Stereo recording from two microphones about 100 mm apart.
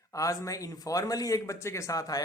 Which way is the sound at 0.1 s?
35° left (ahead or behind).